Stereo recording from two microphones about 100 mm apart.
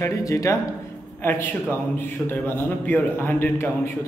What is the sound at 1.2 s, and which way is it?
A man's voice, 20° left (ahead or behind).